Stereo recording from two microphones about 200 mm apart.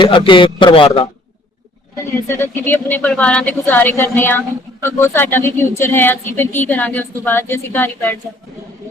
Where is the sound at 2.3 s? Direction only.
10° left (ahead or behind).